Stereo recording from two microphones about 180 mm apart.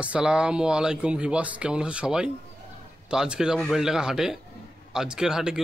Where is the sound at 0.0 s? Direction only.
5° right (ahead or behind).